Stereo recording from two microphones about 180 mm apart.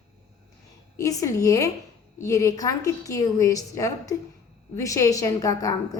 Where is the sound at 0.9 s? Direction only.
20° left (ahead or behind).